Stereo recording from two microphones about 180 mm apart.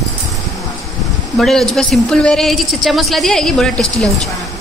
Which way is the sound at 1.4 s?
Centre (ahead or behind).